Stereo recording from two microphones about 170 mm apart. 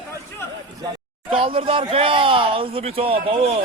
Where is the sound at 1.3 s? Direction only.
30° right (ahead or behind).